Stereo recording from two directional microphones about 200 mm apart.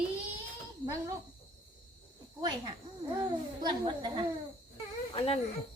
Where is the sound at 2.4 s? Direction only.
20° right (ahead or behind).